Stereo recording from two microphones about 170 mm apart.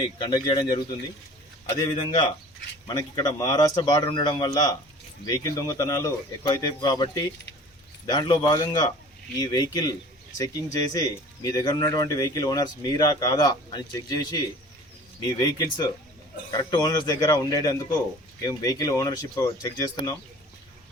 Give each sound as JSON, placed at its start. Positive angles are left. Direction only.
{"t": 0.2, "sound": "speech", "side_deg": 25}
{"t": 10.9, "sound": "speech", "side_deg": 20}